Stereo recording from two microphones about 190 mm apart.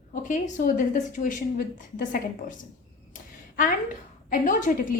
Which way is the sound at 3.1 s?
45° left (ahead or behind).